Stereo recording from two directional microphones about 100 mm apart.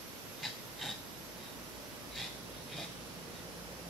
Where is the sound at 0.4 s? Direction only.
Centre (ahead or behind).